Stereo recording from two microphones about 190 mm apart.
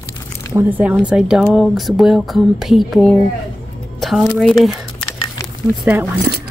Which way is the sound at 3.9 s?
Centre (ahead or behind).